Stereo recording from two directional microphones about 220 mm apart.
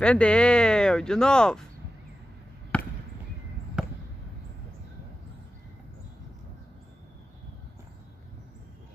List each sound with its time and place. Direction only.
0.0 s speech: 5° left (ahead or behind)
2.7 s basketball bounce: 5° left (ahead or behind)